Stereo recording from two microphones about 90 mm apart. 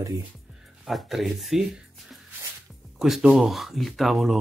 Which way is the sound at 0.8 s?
Centre (ahead or behind).